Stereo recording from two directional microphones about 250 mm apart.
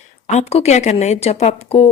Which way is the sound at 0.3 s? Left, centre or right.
Left.